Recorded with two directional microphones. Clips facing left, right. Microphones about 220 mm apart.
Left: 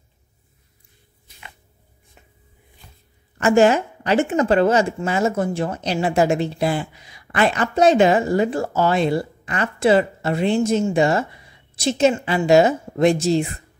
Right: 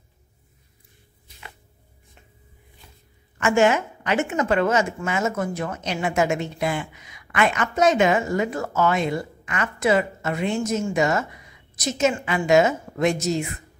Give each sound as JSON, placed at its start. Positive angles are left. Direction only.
{"t": 3.3, "sound": "speech", "side_deg": 35}